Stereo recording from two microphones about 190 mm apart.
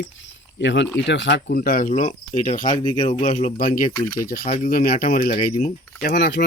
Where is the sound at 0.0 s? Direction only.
75° left (ahead or behind).